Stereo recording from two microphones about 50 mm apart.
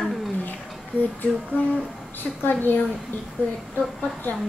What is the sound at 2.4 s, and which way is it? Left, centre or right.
Speech, left.